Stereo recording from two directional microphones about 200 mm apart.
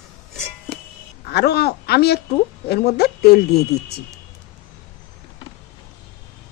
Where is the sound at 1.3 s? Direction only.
55° left (ahead or behind).